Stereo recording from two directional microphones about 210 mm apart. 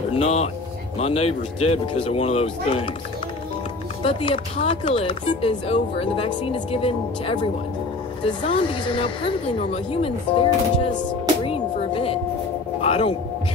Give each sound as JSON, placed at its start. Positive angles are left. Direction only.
{"t": 0.1, "sound": "speech", "side_deg": 30}
{"t": 4.0, "sound": "speech", "side_deg": 25}
{"t": 11.4, "sound": "music", "side_deg": 25}
{"t": 12.8, "sound": "a sound", "side_deg": 30}